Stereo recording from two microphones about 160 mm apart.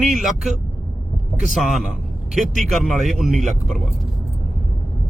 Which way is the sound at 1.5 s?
Centre (ahead or behind).